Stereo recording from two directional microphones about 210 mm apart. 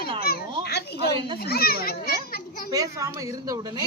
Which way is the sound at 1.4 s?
50° left (ahead or behind).